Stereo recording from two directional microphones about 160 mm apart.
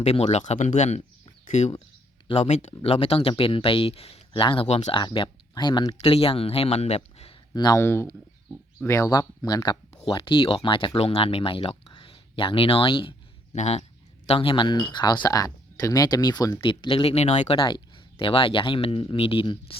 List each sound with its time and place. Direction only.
0.0 s speech: 40° left (ahead or behind)
4.9 s speech: 30° left (ahead or behind)
7.5 s speech: 25° left (ahead or behind)
7.8 s speech: 15° left (ahead or behind); by 13.6 s 35° left (ahead or behind)
13.6 s speech: 45° left (ahead or behind)
17.6 s speech: 30° left (ahead or behind)